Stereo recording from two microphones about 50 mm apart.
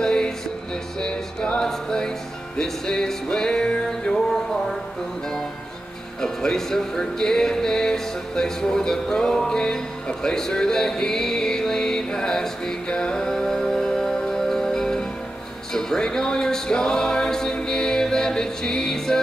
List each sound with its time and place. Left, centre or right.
0.0 s music: centre
6.2 s music: centre